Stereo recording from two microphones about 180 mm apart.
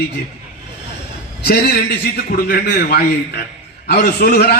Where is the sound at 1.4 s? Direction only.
60° left (ahead or behind).